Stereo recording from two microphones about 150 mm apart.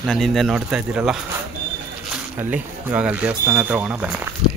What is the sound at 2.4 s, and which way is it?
Speech, 10° right (ahead or behind).